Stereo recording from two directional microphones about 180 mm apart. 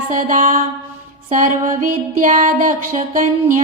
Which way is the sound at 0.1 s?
45° right (ahead or behind).